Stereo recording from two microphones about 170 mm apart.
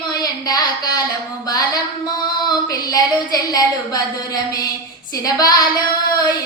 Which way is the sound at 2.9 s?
20° left (ahead or behind).